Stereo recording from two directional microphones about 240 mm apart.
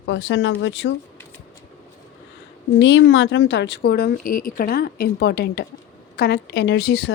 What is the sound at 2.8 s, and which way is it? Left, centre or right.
Speech, left.